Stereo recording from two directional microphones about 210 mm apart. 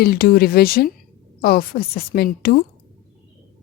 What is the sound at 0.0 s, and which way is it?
A woman's voice, 45° left (ahead or behind).